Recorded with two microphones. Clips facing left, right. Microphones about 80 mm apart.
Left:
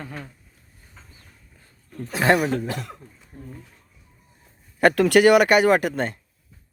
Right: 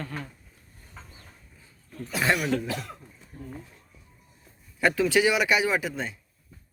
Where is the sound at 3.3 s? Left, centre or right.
Centre.